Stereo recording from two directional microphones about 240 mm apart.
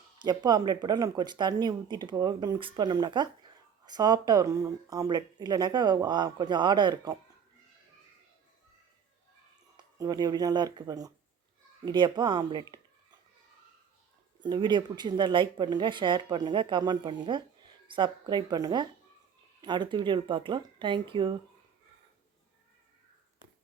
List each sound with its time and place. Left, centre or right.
0.2 s speech: centre
9.7 s speech: centre
14.4 s speech: centre